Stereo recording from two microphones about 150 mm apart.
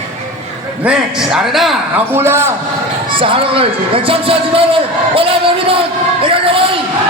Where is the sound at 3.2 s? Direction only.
35° right (ahead or behind).